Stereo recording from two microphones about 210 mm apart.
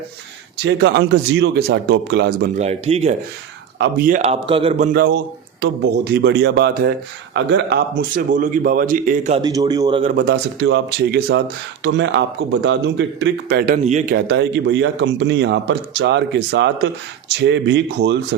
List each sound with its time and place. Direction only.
0.6 s a man's voice: 55° right (ahead or behind)
2.6 s a man's voice: 30° right (ahead or behind)
3.8 s a man's voice: 45° right (ahead or behind); by 4.9 s 30° right (ahead or behind)
4.9 s a man's voice: 50° right (ahead or behind)
9.4 s a man's voice: 20° right (ahead or behind)
10.0 s a man's voice: 40° right (ahead or behind)
10.2 s a man's voice: 55° right (ahead or behind)
13.8 s a man's voice: 35° right (ahead or behind); by 18.3 s 55° right (ahead or behind)